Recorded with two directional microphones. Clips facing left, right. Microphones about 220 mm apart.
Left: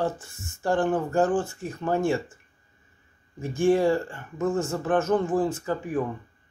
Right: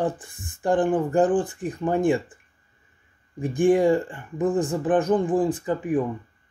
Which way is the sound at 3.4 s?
15° right (ahead or behind).